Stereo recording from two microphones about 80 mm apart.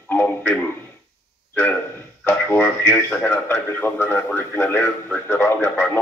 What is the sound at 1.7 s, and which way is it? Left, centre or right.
A man's voice, left.